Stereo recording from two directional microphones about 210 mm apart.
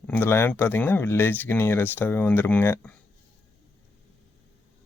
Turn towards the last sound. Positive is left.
turn(degrees=10)  # may be behind; listen again after turning